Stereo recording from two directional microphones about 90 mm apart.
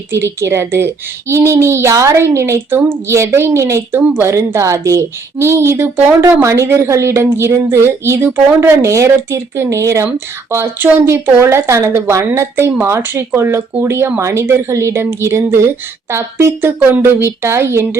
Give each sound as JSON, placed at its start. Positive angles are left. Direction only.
{"t": 0.3, "sound": "a woman's voice", "side_deg": -30}